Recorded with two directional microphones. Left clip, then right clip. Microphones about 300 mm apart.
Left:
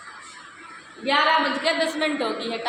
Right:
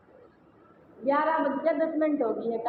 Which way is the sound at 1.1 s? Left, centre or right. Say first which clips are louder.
Left 5 dB; left.